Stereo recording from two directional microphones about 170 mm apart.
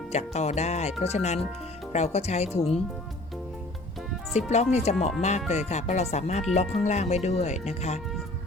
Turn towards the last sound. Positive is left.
turn(degrees=40)  # may be behind; listen again after turning